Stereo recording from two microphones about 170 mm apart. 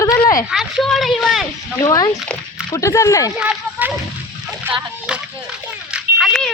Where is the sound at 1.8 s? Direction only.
20° left (ahead or behind).